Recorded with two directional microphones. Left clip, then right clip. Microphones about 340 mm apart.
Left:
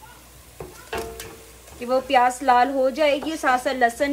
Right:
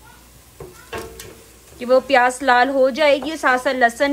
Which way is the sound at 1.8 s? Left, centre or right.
Right.